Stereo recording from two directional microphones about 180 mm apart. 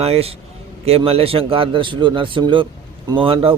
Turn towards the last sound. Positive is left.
turn(degrees=-30)  # may be behind; listen again after turning